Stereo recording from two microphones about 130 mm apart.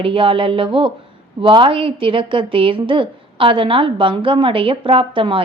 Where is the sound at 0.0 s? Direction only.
40° right (ahead or behind).